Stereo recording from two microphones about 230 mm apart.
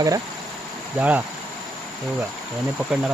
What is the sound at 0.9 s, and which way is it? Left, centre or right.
Speech, centre.